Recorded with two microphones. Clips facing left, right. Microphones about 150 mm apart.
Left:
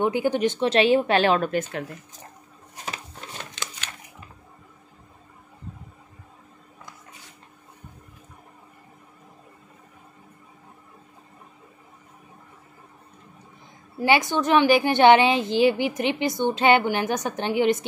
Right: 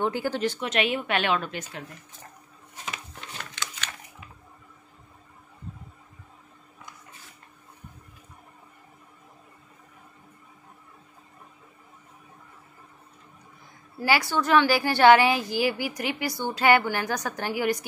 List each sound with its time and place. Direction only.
0.0 s speech: 15° left (ahead or behind)
0.6 s speech: 30° left (ahead or behind)
2.8 s a sound: 35° left (ahead or behind)
13.9 s a woman's voice: 20° left (ahead or behind)